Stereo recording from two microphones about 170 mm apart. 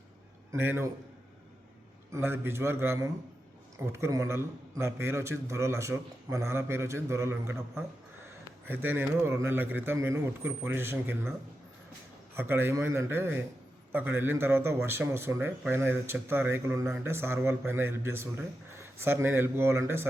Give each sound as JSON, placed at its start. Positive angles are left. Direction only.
{"t": 0.5, "sound": "a man's voice", "side_deg": -15}
{"t": 2.1, "sound": "a man's voice", "side_deg": -15}
{"t": 8.6, "sound": "a man's voice", "side_deg": -10}